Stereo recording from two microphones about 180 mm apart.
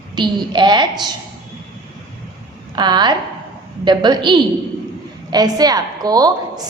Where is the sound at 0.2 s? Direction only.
25° right (ahead or behind).